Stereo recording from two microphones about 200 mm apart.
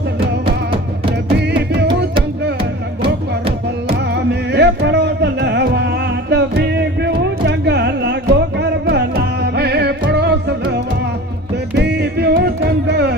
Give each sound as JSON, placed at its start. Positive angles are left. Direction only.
{"t": 1.4, "sound": "music", "side_deg": -55}
{"t": 2.6, "sound": "music", "side_deg": -25}
{"t": 4.1, "sound": "music", "side_deg": -55}